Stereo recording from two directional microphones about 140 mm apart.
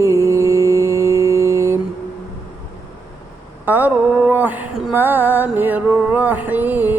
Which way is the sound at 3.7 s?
15° right (ahead or behind).